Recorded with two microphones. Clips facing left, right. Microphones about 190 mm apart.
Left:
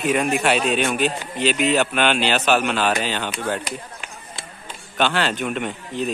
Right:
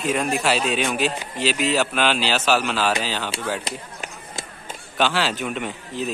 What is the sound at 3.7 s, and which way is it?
Run, 40° right (ahead or behind).